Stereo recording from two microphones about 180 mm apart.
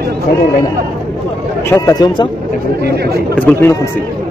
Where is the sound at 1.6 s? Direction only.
15° left (ahead or behind).